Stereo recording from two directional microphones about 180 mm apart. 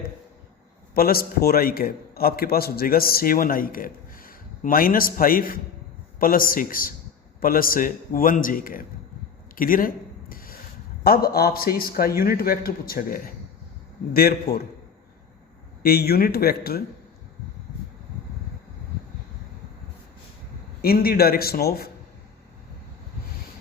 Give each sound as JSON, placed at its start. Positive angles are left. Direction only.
{"t": 0.9, "sound": "a man's voice", "side_deg": 55}
{"t": 9.6, "sound": "a sound", "side_deg": 50}
{"t": 11.0, "sound": "a man's voice", "side_deg": 60}
{"t": 15.8, "sound": "a man's voice", "side_deg": 60}
{"t": 20.8, "sound": "a man's voice", "side_deg": 55}